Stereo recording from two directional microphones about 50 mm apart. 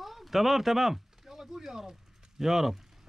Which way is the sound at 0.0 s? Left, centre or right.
Centre.